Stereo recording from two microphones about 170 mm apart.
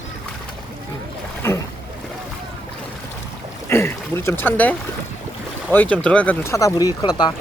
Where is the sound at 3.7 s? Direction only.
15° left (ahead or behind).